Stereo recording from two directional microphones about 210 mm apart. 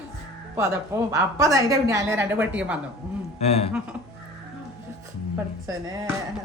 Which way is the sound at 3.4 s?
30° left (ahead or behind).